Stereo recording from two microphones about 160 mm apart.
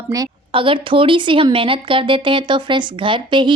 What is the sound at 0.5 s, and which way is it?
Speech, 30° right (ahead or behind).